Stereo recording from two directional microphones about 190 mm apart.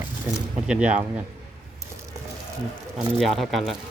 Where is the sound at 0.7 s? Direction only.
5° right (ahead or behind).